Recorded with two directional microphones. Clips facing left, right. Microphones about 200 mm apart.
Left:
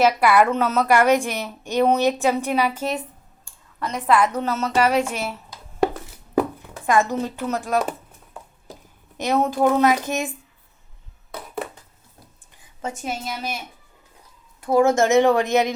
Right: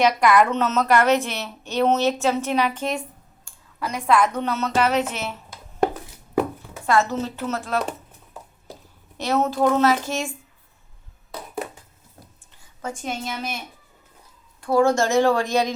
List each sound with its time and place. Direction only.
0.0 s a woman's voice: 5° left (ahead or behind)
6.8 s a woman's voice: 15° left (ahead or behind)
13.0 s a woman's voice: 5° left (ahead or behind)
14.6 s a woman's voice: 20° left (ahead or behind)